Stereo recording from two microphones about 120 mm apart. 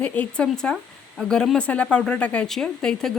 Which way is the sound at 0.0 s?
10° left (ahead or behind).